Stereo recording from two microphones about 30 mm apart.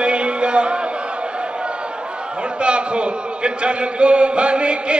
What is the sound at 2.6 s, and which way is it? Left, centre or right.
A man's voice, right.